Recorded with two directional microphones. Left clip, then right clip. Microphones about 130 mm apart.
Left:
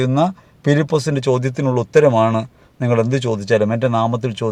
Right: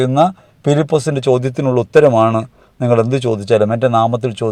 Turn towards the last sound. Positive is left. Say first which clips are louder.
# right 4 dB
turn(degrees=-10)  # may be behind; listen again after turning